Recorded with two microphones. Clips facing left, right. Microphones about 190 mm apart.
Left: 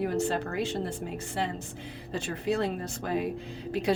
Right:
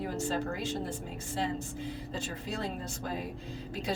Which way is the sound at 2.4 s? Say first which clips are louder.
Left 12 dB; 65° left (ahead or behind).